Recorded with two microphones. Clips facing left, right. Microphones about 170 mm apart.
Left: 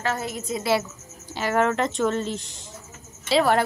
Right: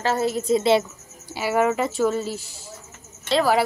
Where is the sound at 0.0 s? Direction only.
30° right (ahead or behind).